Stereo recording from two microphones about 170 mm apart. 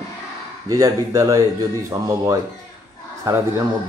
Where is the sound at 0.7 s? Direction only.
20° right (ahead or behind).